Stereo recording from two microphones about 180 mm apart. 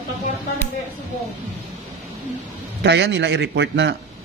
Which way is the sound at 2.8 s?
75° right (ahead or behind).